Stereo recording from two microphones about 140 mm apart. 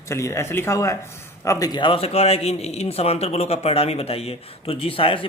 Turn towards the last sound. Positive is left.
turn(degrees=40)  # may be behind; listen again after turning